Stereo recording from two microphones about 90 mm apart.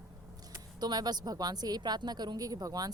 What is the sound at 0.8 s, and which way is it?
Speech, 50° right (ahead or behind).